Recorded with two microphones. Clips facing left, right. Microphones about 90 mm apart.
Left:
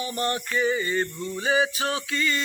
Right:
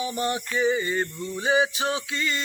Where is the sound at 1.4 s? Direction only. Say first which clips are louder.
Right 1 dB; 20° right (ahead or behind).